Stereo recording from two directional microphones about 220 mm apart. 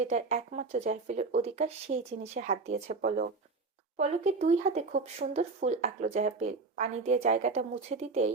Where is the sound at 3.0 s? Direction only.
40° right (ahead or behind).